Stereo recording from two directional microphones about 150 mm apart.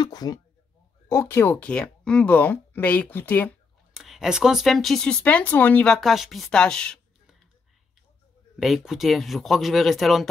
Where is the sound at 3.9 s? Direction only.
Centre (ahead or behind).